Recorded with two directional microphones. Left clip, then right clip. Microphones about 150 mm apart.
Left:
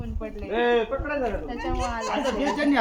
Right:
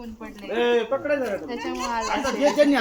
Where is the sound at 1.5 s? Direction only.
25° left (ahead or behind).